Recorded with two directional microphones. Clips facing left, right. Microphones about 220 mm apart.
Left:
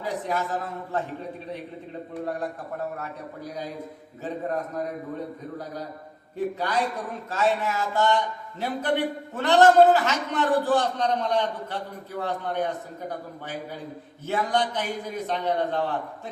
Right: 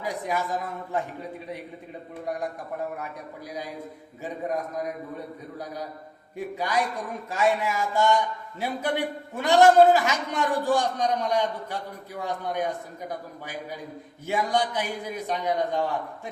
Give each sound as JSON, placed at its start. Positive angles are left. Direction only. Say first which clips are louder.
{"t": 0.0, "sound": "a man's voice", "louder": "left 1 dB", "side_deg": -10}
{"t": 3.0, "sound": "a man's voice", "louder": "left 2 dB", "side_deg": -10}
{"t": 6.3, "sound": "a man's voice", "louder": "left 1 dB", "side_deg": -10}